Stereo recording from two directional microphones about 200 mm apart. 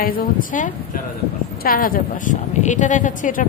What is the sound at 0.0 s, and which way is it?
A woman's voice, 45° left (ahead or behind).